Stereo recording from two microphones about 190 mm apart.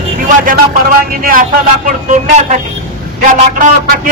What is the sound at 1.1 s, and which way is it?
Speech, 50° right (ahead or behind).